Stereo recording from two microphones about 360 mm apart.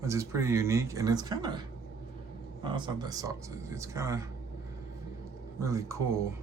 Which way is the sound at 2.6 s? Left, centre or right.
Centre.